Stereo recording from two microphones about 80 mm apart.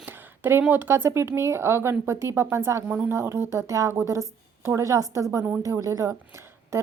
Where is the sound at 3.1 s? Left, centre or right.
Right.